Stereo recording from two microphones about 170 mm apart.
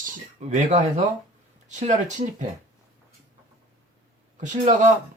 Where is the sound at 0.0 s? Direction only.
50° right (ahead or behind).